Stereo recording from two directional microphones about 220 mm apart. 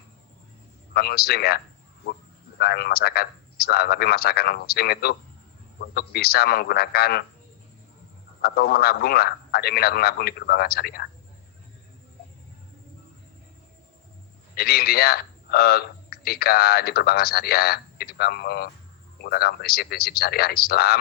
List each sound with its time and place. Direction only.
0.9 s a man's voice: 45° left (ahead or behind)
8.4 s a man's voice: 45° left (ahead or behind)
14.5 s a man's voice: 45° left (ahead or behind)